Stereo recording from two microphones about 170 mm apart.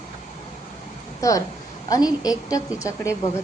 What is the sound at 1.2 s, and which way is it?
A woman's voice, 20° left (ahead or behind).